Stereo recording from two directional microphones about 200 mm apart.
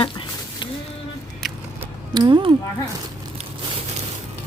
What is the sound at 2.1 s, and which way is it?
Speech, 20° right (ahead or behind).